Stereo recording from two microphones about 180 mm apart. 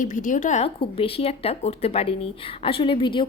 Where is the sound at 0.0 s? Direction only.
45° left (ahead or behind).